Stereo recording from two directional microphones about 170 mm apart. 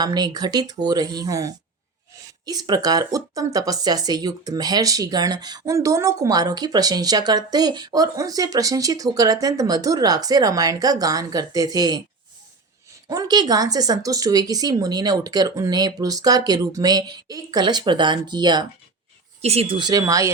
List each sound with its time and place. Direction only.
0.0 s speech: 25° right (ahead or behind)
13.1 s speech: 25° right (ahead or behind)
19.4 s speech: 35° right (ahead or behind); by 20.3 s 20° right (ahead or behind)